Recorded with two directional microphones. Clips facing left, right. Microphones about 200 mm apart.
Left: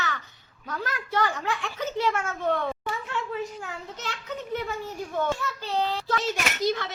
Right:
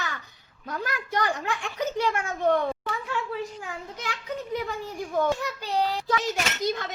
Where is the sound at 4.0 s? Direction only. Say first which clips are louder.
Right 2 dB; 15° right (ahead or behind).